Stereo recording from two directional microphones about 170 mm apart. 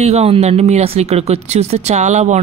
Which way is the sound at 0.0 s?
40° right (ahead or behind).